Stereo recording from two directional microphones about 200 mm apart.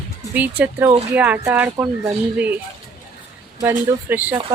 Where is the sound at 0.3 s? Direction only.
10° right (ahead or behind).